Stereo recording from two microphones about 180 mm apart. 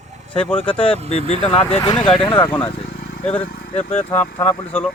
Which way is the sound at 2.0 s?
5° left (ahead or behind).